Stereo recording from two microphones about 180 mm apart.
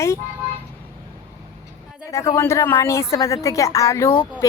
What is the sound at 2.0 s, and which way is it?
A woman's voice, 15° left (ahead or behind).